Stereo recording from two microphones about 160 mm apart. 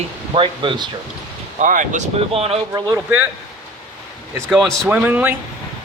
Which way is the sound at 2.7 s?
25° right (ahead or behind).